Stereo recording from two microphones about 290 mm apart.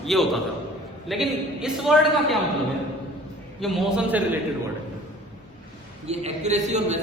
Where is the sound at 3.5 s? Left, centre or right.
Centre.